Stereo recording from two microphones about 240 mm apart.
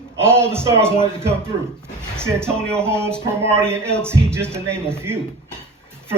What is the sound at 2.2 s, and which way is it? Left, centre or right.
Speech, centre.